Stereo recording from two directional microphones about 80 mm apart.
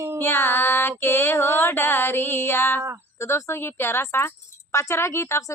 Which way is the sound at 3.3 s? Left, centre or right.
Left.